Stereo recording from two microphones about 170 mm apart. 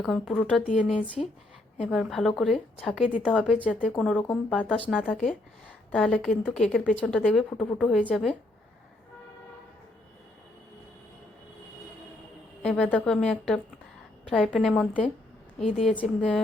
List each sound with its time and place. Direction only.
0.0 s a woman's voice: centre (ahead or behind)
1.0 s speech: 30° left (ahead or behind)
1.8 s a woman's voice: centre (ahead or behind)
12.6 s a woman's voice: 5° left (ahead or behind)